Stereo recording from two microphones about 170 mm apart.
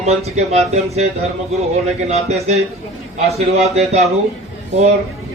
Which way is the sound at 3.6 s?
40° right (ahead or behind).